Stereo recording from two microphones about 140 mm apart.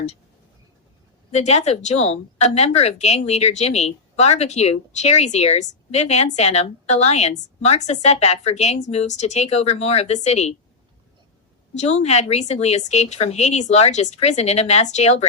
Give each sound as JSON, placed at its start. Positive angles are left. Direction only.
{"t": 1.3, "sound": "a woman's voice", "side_deg": 50}
{"t": 11.7, "sound": "a woman's voice", "side_deg": 55}